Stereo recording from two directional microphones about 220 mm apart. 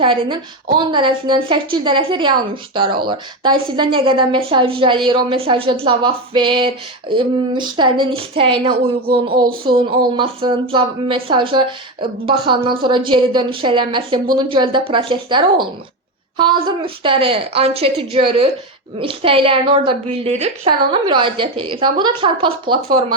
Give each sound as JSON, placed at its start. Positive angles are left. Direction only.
{"t": 0.0, "sound": "a woman's voice", "side_deg": -20}